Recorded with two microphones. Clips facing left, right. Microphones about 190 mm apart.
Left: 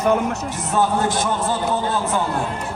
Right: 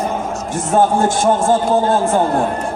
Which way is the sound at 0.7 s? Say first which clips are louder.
Right 5 dB; 50° right (ahead or behind).